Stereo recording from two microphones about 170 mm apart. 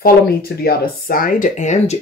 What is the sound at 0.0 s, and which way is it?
Speech, 65° left (ahead or behind).